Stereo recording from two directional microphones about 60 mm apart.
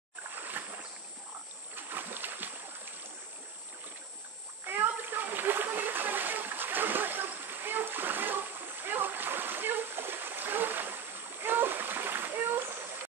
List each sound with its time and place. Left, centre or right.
0.3 s a sound: right
1.8 s boat: right
4.6 s splash: right